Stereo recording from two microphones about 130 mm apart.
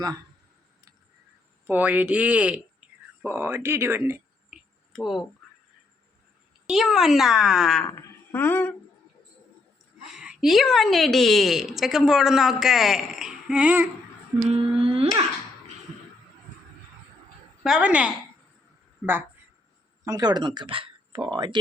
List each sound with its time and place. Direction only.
1.6 s speech: 15° right (ahead or behind)
4.5 s a sound: centre (ahead or behind)
6.7 s a woman's voice: centre (ahead or behind)
7.9 s speech: 15° left (ahead or behind)
10.0 s a woman's voice: 5° right (ahead or behind)
14.5 s a sound: 45° right (ahead or behind)
17.6 s speech: 5° right (ahead or behind)
20.1 s speech: 30° right (ahead or behind)